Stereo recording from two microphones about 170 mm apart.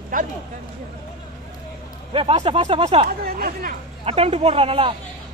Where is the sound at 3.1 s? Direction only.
60° right (ahead or behind).